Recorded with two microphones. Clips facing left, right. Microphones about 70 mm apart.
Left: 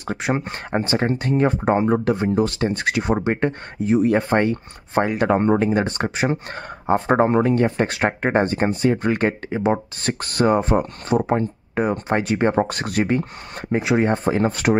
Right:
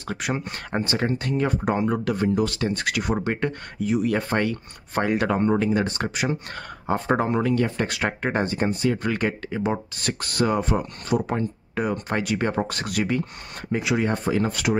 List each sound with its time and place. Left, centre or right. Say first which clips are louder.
0.0 s speech: left 5 dB; left